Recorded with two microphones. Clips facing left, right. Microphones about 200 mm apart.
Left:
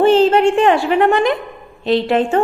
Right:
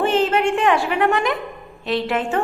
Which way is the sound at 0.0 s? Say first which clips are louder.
Left 7 dB; 35° left (ahead or behind).